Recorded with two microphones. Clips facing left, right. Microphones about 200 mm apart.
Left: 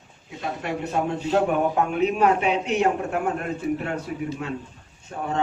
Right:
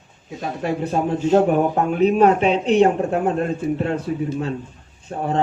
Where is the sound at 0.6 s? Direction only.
35° right (ahead or behind).